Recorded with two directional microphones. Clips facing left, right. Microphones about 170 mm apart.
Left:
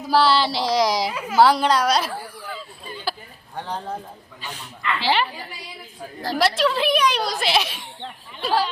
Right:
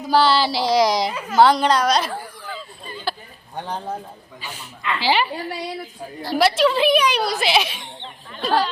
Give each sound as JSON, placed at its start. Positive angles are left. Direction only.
{"t": 0.1, "sound": "a woman's voice", "side_deg": 0}
{"t": 4.4, "sound": "a woman's voice", "side_deg": -5}
{"t": 5.3, "sound": "a woman's voice", "side_deg": -70}
{"t": 6.3, "sound": "a woman's voice", "side_deg": 0}